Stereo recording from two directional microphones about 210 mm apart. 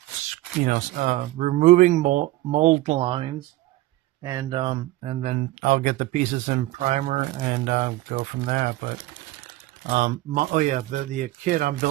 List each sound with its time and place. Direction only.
0.6 s speech: 40° right (ahead or behind)
4.2 s speech: 15° right (ahead or behind); by 11.9 s 40° right (ahead or behind)